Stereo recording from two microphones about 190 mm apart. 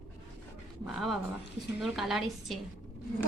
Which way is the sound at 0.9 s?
Centre (ahead or behind).